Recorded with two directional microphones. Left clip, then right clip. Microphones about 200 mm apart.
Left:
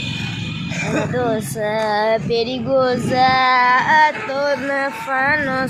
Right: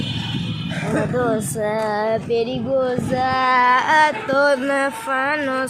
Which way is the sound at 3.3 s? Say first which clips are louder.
Right 1 dB; 10° right (ahead or behind).